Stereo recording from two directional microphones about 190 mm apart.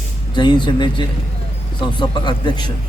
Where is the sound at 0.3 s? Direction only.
25° left (ahead or behind).